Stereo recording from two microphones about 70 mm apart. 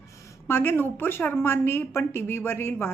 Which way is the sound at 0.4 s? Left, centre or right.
Left.